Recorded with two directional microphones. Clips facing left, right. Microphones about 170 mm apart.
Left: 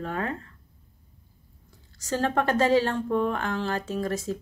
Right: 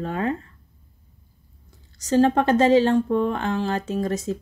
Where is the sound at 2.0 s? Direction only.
20° right (ahead or behind).